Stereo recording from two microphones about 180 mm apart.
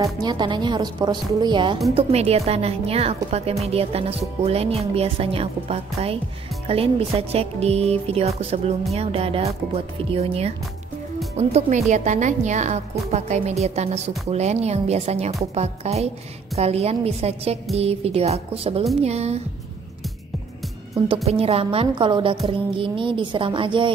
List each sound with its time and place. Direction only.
0.0 s a woman's voice: 25° right (ahead or behind)
21.3 s a woman's voice: 35° right (ahead or behind)